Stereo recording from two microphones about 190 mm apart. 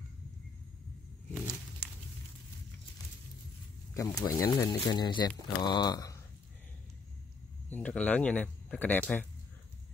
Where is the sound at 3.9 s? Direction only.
15° left (ahead or behind).